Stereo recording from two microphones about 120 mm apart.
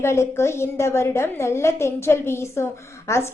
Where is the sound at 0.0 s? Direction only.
20° left (ahead or behind).